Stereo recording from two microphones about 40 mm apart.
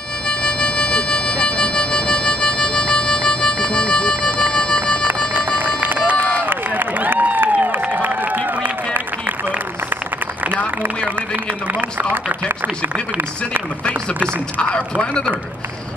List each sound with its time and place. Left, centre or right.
0.3 s music: left
5.3 s run: right
6.4 s a sound: right
7.9 s run: right
11.6 s run: right
14.6 s speech: left